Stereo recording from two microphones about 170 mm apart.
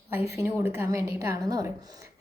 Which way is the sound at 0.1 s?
15° right (ahead or behind).